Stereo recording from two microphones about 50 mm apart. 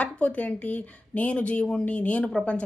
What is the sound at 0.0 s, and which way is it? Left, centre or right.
Speech, left.